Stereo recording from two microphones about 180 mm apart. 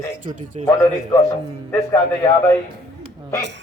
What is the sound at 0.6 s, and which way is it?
Speech, 35° right (ahead or behind).